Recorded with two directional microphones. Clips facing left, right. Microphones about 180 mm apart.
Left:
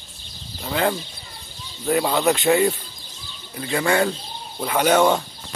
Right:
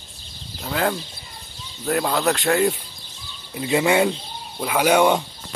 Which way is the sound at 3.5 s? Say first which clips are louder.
Right 3 dB; 20° right (ahead or behind).